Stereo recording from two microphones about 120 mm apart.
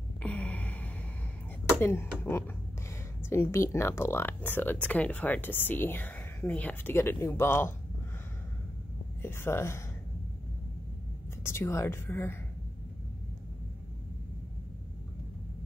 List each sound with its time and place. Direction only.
0.2 s a sound: 10° left (ahead or behind)
1.8 s a woman's voice: 20° left (ahead or behind)
9.2 s a woman's voice: 20° left (ahead or behind)
11.4 s a woman's voice: 20° left (ahead or behind)